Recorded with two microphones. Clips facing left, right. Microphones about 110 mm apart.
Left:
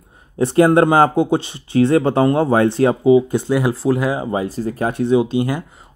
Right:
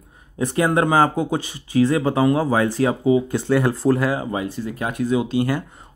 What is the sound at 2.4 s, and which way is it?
Speech, 45° left (ahead or behind).